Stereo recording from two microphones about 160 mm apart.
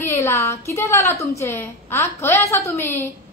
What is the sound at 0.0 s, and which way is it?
A woman's voice, 15° left (ahead or behind).